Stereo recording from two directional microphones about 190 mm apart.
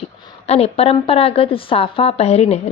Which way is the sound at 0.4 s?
35° left (ahead or behind).